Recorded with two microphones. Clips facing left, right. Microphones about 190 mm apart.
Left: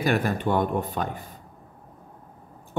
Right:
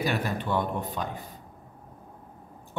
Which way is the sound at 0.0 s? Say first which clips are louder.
Left 5 dB; 50° left (ahead or behind).